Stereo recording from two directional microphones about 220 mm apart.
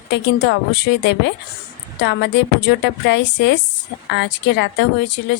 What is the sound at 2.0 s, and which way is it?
A woman's voice, 50° left (ahead or behind).